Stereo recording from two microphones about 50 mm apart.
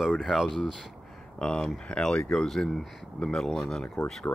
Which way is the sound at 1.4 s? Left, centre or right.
Centre.